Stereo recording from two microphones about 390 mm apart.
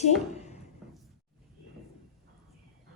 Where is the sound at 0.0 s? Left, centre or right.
Centre.